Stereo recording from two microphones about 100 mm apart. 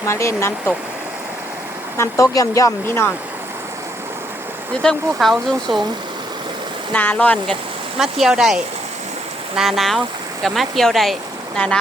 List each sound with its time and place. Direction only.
0.0 s speech: 30° left (ahead or behind)
2.0 s speech: 30° left (ahead or behind)
4.8 s speech: 5° left (ahead or behind)
6.9 s speech: 15° left (ahead or behind)
7.9 s speech: 5° right (ahead or behind)